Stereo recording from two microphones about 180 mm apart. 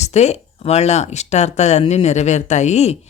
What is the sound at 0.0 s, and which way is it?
Speech, 40° left (ahead or behind).